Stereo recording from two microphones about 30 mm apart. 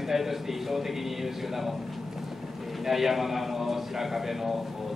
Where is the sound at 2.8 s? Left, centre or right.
Centre.